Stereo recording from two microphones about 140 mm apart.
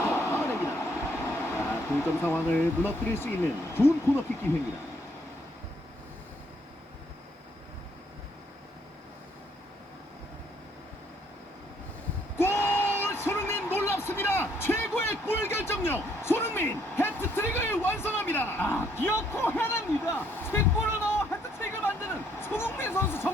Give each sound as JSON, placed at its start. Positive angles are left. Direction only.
{"t": 0.0, "sound": "vehicle", "side_deg": 20}
{"t": 1.5, "sound": "speech", "side_deg": 15}
{"t": 12.4, "sound": "a sound", "side_deg": 15}